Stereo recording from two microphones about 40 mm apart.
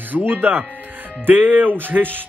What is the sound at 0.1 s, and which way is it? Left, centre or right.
Speech, right.